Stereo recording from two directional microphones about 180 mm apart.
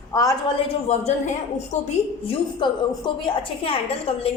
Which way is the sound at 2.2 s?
25° left (ahead or behind).